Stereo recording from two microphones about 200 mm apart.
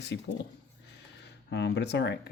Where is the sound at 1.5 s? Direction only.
60° left (ahead or behind).